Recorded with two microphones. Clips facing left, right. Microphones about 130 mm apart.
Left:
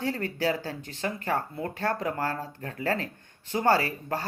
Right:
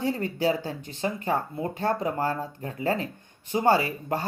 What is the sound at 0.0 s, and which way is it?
Speech, 15° right (ahead or behind).